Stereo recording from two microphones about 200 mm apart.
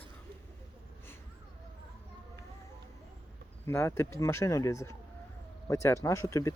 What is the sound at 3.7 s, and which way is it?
Speech, 10° left (ahead or behind).